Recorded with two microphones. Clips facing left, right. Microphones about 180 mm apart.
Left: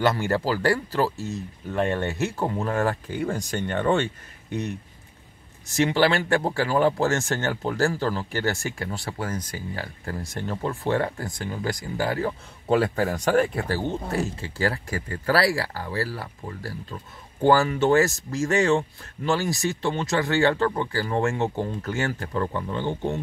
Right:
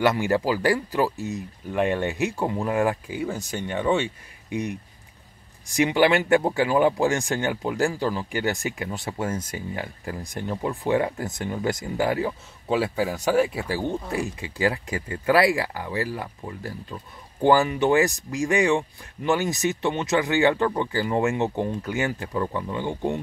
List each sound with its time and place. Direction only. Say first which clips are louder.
0.0 s speech: right 2 dB; 15° right (ahead or behind)
12.3 s speech: left 3 dB; 5° right (ahead or behind)